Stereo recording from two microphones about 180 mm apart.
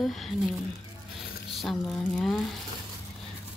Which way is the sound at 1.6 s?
5° left (ahead or behind).